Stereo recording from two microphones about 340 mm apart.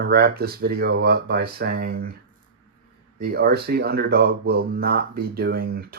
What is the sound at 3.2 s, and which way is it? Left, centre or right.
Speech, right.